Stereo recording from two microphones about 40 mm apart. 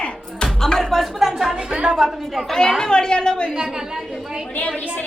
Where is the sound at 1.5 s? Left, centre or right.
Right.